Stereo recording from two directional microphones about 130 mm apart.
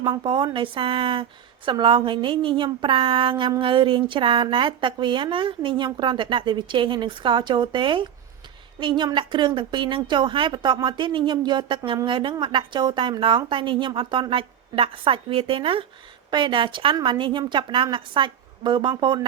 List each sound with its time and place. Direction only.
0.0 s a woman's voice: 40° right (ahead or behind)